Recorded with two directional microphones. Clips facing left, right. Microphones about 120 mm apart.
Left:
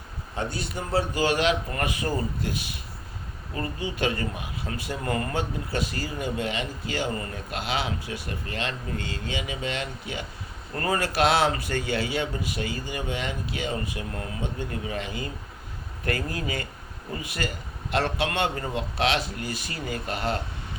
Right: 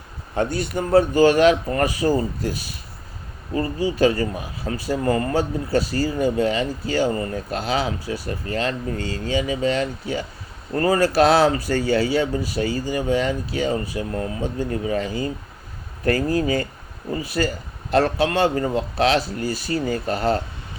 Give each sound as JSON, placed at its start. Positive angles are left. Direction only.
{"t": 0.3, "sound": "speech", "side_deg": -55}